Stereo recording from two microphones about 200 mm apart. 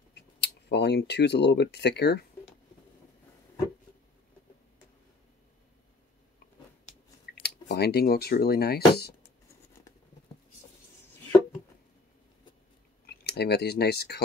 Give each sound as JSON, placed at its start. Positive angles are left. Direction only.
{"t": 0.4, "sound": "speech", "side_deg": 55}
{"t": 7.3, "sound": "a sound", "side_deg": 50}
{"t": 7.6, "sound": "speech", "side_deg": 55}
{"t": 13.0, "sound": "speech", "side_deg": 55}